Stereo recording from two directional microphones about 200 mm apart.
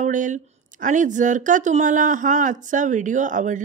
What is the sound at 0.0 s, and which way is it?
Speech, 40° right (ahead or behind).